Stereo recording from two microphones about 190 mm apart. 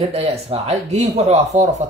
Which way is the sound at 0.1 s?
35° right (ahead or behind).